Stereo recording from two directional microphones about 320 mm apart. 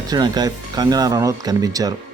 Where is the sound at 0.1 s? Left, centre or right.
Centre.